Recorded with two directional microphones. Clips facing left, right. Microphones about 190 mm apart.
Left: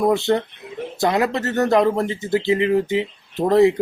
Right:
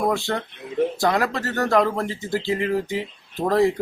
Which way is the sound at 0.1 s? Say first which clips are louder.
Left 6 dB; 20° left (ahead or behind).